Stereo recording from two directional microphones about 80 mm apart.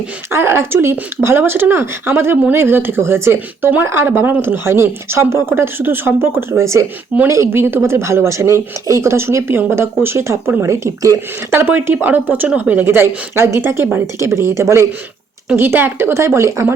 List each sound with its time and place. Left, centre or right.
0.3 s speech: right
11.5 s speech: right